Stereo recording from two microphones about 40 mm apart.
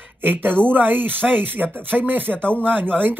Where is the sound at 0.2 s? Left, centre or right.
Right.